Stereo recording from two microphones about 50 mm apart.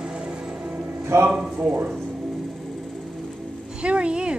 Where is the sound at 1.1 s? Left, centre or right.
Right.